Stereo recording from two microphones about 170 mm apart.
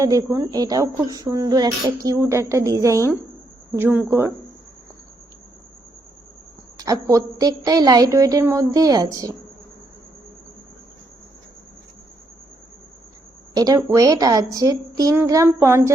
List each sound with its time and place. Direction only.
0.0 s a woman's voice: 20° right (ahead or behind)
6.7 s a woman's voice: 20° right (ahead or behind)
13.5 s a woman's voice: 20° right (ahead or behind)